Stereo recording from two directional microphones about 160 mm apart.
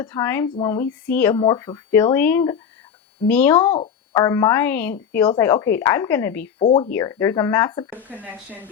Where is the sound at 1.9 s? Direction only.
15° left (ahead or behind).